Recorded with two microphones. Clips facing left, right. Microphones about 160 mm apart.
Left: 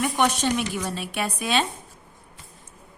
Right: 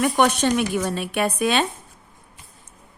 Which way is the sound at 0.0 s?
50° right (ahead or behind).